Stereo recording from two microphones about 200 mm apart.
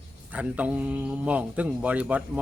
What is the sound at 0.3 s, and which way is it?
Speech, 5° right (ahead or behind).